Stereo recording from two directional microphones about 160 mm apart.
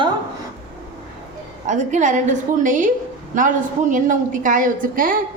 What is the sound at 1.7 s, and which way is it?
A woman's voice, 50° right (ahead or behind).